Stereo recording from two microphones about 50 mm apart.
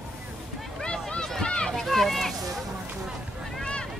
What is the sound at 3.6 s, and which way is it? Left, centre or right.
Boat, centre.